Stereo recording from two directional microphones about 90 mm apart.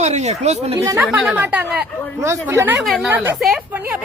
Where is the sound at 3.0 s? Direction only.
20° right (ahead or behind).